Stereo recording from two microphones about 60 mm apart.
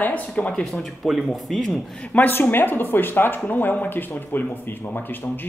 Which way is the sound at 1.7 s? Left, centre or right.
Left.